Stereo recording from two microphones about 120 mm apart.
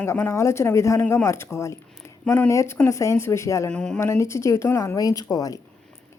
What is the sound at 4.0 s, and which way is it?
A woman's voice, 25° left (ahead or behind).